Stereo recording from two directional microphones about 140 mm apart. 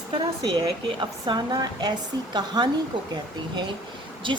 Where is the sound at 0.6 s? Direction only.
30° right (ahead or behind).